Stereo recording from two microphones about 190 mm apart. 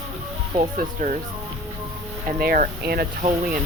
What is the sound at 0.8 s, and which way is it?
Speech, 45° right (ahead or behind).